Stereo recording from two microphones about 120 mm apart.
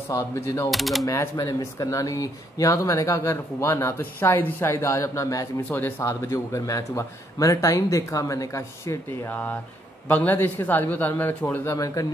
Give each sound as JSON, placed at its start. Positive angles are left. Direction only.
{"t": 0.1, "sound": "speech", "side_deg": 20}
{"t": 0.7, "sound": "speech", "side_deg": 0}
{"t": 1.0, "sound": "speech", "side_deg": 25}
{"t": 5.7, "sound": "a man's voice", "side_deg": 15}